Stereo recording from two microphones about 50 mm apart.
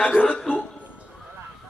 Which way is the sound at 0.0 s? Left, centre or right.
Left.